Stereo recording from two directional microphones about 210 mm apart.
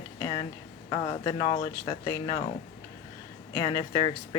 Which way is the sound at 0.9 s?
25° left (ahead or behind).